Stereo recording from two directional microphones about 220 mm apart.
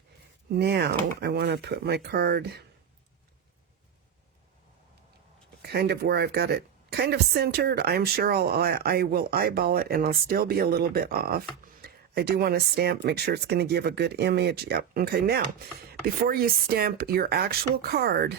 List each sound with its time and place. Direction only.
0.5 s speech: 45° right (ahead or behind)
5.6 s speech: 50° right (ahead or behind)